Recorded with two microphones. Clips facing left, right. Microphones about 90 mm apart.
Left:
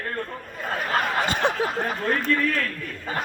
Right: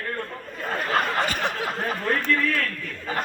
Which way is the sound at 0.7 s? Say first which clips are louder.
Even; 5° left (ahead or behind).